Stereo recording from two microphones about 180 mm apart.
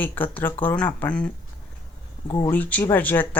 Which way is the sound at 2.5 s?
10° left (ahead or behind).